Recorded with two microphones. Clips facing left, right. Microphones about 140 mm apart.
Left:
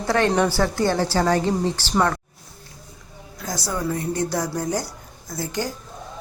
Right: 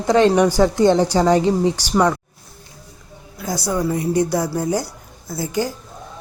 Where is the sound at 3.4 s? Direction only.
10° right (ahead or behind).